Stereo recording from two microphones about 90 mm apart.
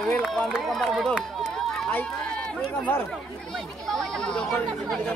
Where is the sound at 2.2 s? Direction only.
10° left (ahead or behind).